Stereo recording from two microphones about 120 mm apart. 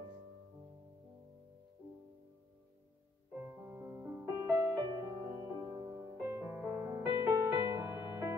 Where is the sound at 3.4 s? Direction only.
15° right (ahead or behind).